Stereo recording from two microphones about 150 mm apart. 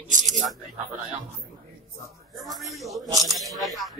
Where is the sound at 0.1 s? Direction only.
55° right (ahead or behind).